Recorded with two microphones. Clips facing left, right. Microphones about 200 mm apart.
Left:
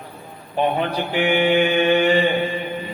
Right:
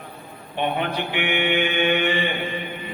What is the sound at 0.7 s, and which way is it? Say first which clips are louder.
Mantra: left 4 dB; 35° left (ahead or behind).